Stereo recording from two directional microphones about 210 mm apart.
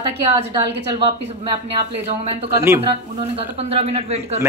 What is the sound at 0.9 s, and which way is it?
Speech, 25° right (ahead or behind).